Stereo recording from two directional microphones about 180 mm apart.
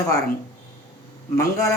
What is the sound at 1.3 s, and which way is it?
Speech, 15° left (ahead or behind).